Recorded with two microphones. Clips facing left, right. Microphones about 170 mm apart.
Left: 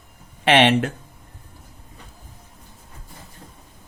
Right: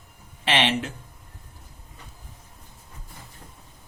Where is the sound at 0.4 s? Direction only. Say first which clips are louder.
Left 8 dB; 55° left (ahead or behind).